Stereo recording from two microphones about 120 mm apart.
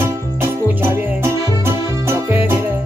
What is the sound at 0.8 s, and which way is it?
Music, 20° right (ahead or behind).